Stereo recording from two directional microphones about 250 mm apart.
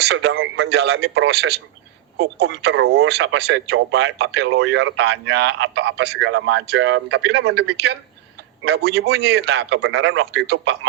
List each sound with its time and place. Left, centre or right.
0.1 s speech: right